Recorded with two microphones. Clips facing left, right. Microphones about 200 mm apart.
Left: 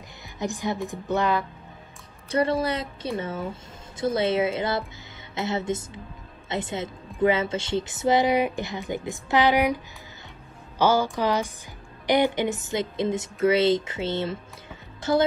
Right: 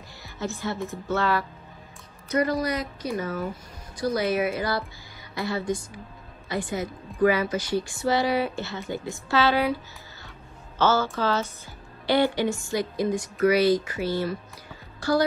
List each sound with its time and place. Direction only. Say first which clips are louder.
0.4 s speech: left 2 dB; 15° left (ahead or behind)
2.2 s speech: left 1 dB; 30° left (ahead or behind)
10.8 s speech: left 1 dB; 15° left (ahead or behind)